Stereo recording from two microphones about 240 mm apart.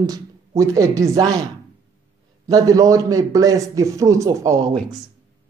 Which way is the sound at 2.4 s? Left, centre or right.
Centre.